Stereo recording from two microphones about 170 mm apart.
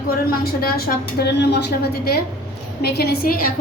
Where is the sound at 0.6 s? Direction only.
60° left (ahead or behind).